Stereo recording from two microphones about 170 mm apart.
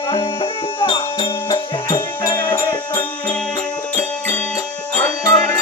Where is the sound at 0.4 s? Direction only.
30° left (ahead or behind).